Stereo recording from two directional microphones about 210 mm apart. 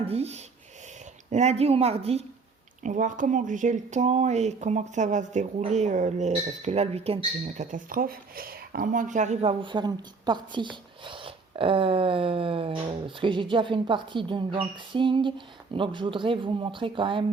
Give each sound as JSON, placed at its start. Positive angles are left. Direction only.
{"t": 0.0, "sound": "speech", "side_deg": -30}